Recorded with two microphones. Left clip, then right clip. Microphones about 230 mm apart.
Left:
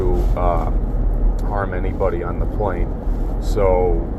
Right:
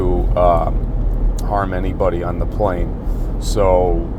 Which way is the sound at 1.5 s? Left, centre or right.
Right.